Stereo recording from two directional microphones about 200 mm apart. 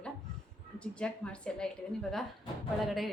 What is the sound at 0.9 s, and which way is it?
Speech, 5° left (ahead or behind).